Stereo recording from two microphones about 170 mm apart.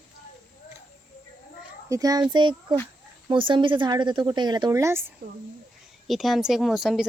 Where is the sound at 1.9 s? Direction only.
20° right (ahead or behind).